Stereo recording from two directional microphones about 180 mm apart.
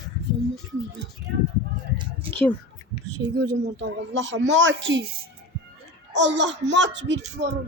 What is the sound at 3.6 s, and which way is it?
A woman's voice, 80° right.